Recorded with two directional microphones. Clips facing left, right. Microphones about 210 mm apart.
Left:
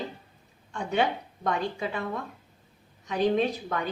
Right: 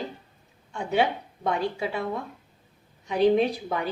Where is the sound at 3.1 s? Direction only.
10° right (ahead or behind).